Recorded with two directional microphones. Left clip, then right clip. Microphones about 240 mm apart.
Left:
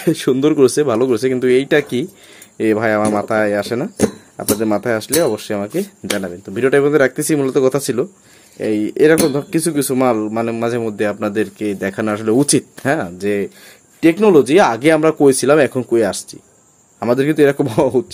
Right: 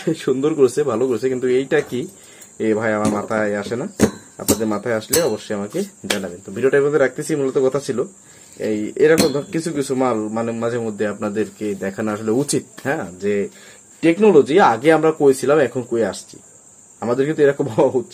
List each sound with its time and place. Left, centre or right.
0.0 s speech: left